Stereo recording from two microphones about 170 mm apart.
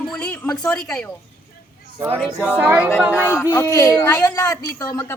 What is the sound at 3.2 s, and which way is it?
A woman's voice, 15° left (ahead or behind).